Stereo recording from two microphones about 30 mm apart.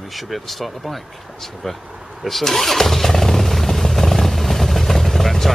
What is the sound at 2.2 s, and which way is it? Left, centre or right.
Vehicle, centre.